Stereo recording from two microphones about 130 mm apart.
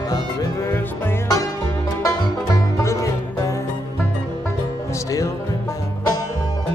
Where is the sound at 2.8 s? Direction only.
20° left (ahead or behind).